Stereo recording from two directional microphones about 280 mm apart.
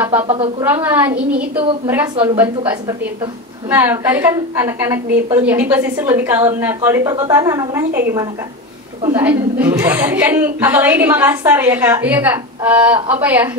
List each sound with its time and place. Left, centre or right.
0.0 s speech: centre
0.3 s speech: centre
0.8 s a woman's voice: centre
9.0 s a woman's voice: centre